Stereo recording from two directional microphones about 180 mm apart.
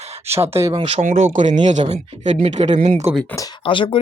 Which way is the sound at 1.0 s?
40° right (ahead or behind).